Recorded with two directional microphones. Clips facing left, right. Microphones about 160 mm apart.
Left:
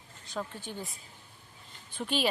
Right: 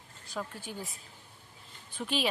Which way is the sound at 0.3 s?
5° right (ahead or behind).